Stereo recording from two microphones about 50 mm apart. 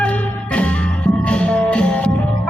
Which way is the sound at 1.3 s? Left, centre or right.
Centre.